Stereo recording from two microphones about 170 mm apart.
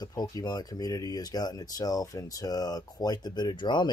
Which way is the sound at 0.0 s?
20° left (ahead or behind).